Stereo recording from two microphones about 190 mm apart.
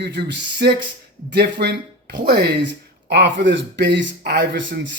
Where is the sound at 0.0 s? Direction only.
65° right (ahead or behind).